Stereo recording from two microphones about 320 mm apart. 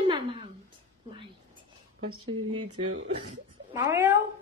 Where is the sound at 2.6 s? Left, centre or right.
Right.